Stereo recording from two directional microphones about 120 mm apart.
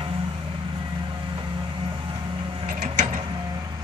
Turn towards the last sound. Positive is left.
turn(degrees=-90)